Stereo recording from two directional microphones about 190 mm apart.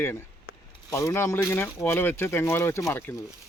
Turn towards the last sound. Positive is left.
turn(degrees=10)  # may be behind; listen again after turning